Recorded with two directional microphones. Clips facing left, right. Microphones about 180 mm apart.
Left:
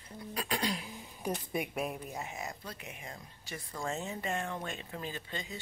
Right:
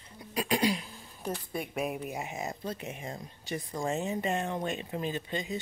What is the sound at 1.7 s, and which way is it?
Speech, 5° right (ahead or behind).